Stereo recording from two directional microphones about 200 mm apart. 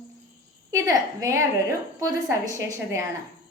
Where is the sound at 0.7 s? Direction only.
15° right (ahead or behind).